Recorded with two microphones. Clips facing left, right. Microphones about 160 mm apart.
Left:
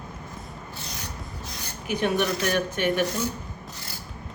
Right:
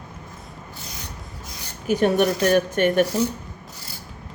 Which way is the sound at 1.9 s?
45° right (ahead or behind).